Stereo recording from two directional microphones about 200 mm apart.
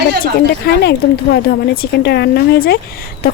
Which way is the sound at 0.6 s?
55° left (ahead or behind).